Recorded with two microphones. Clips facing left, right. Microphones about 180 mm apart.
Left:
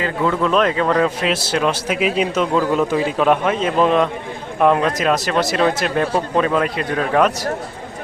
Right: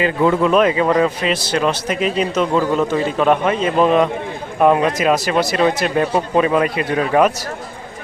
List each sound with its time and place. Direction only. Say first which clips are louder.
0.0 s speech: right 4 dB; 20° right (ahead or behind)
0.5 s a man's voice: right 2 dB; 5° right (ahead or behind)